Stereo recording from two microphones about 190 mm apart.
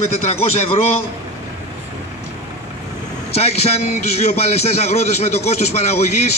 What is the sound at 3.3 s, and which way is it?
Speech, 35° left (ahead or behind).